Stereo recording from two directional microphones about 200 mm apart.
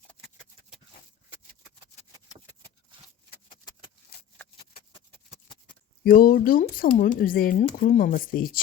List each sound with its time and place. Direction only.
6.1 s speech: 45° left (ahead or behind)